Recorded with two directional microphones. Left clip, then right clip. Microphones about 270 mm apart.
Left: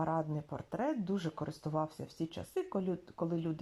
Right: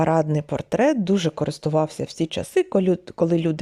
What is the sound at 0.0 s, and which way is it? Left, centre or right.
Speech, right.